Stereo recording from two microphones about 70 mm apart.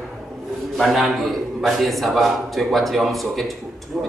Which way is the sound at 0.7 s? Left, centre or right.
Centre.